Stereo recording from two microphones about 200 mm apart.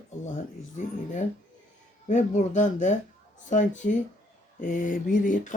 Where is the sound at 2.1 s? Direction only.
35° left (ahead or behind).